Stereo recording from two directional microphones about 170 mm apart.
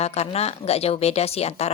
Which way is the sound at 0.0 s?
40° left (ahead or behind).